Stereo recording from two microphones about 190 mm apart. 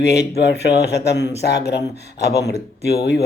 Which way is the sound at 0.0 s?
60° left (ahead or behind).